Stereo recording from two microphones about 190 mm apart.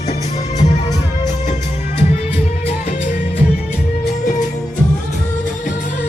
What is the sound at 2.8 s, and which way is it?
Music, 40° left (ahead or behind).